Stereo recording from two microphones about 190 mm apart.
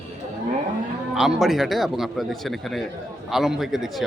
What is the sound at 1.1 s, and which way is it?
A man's voice, centre (ahead or behind).